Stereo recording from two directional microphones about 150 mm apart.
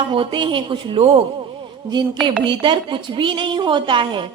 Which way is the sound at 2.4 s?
30° right (ahead or behind).